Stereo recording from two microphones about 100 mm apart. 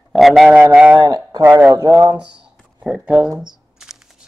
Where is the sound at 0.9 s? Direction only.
45° right (ahead or behind).